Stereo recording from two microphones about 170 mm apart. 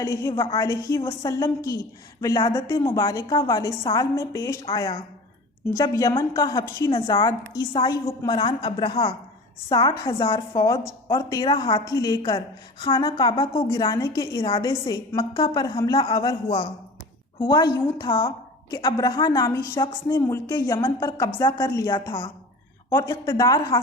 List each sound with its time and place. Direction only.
0.0 s a woman's voice: 20° left (ahead or behind)
14.4 s speech: 30° left (ahead or behind)
14.7 s a woman's voice: 20° left (ahead or behind)
22.9 s a woman's voice: 15° left (ahead or behind)